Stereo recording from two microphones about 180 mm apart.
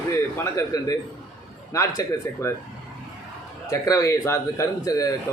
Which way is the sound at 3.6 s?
20° left (ahead or behind).